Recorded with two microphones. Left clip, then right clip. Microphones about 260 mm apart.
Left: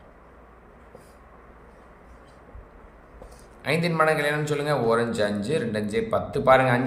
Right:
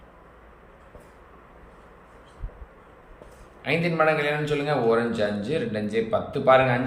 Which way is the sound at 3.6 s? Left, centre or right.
Centre.